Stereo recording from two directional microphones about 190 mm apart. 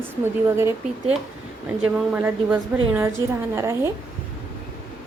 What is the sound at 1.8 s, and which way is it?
A woman's voice, 10° right (ahead or behind).